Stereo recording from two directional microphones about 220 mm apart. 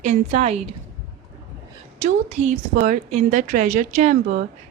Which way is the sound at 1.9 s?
30° right (ahead or behind).